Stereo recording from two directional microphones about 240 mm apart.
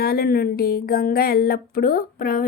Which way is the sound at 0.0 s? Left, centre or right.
Left.